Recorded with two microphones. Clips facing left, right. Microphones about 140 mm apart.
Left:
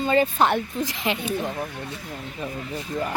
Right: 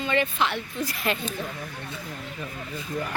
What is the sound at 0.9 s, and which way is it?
Speech, 20° left (ahead or behind).